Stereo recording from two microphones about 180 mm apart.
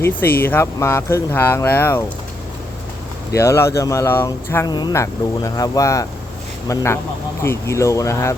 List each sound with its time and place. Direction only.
0.0 s speech: 10° left (ahead or behind)
3.3 s speech: 15° left (ahead or behind)